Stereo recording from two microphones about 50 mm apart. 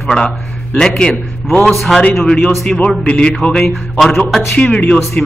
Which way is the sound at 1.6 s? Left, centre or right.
Centre.